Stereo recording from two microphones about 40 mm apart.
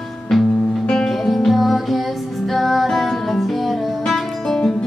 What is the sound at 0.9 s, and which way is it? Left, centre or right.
Music, centre.